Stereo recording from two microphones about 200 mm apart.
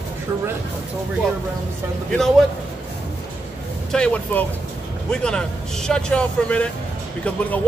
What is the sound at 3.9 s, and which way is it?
Speech, 5° left (ahead or behind).